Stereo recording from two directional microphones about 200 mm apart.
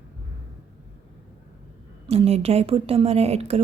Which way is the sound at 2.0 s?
30° right (ahead or behind).